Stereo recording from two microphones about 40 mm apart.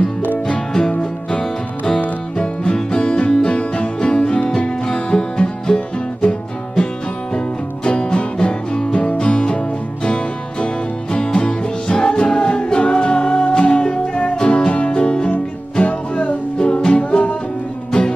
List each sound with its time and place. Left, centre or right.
0.5 s music: centre
2.3 s music: left